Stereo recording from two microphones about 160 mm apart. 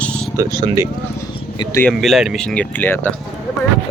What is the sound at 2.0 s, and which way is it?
Speech, centre (ahead or behind).